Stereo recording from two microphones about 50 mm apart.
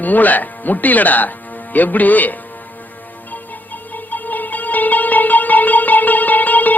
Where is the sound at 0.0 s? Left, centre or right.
Left.